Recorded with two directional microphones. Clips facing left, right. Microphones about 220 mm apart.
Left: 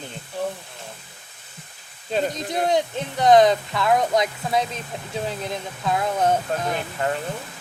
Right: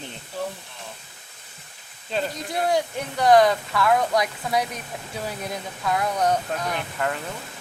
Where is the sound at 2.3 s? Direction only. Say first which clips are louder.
Left 2 dB; 20° left (ahead or behind).